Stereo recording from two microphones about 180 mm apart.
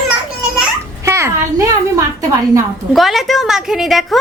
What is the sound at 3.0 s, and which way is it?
A woman's voice, centre (ahead or behind).